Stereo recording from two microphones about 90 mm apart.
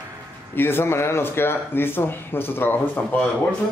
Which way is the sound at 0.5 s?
25° left (ahead or behind).